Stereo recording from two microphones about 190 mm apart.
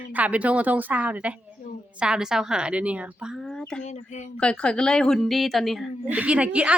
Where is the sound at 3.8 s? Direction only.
40° left (ahead or behind).